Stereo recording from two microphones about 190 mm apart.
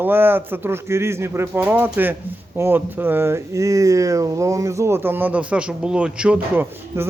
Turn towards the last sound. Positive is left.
turn(degrees=-10)  # may be behind; listen again after turning